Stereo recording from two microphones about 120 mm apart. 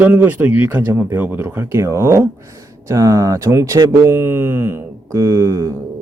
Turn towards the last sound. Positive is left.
turn(degrees=-25)  # may be behind; listen again after turning